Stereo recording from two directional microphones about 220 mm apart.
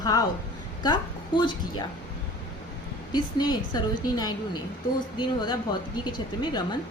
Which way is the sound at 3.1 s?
20° left (ahead or behind).